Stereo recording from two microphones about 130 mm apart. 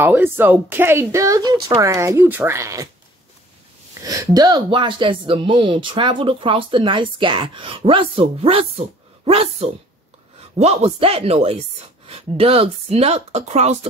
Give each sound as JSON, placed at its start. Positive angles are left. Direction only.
{"t": 0.0, "sound": "a woman's voice", "side_deg": -15}
{"t": 4.0, "sound": "speech", "side_deg": -25}